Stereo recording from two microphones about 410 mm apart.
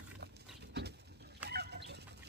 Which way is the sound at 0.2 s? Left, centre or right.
Right.